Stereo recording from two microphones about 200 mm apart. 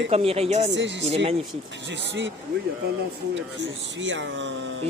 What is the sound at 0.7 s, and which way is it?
Speech, 65° right (ahead or behind).